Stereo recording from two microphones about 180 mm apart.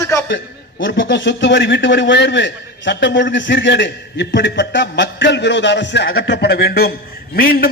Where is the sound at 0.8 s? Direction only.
90° left.